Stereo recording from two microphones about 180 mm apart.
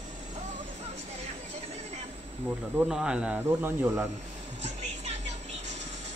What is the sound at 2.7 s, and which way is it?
Speech, 5° right (ahead or behind).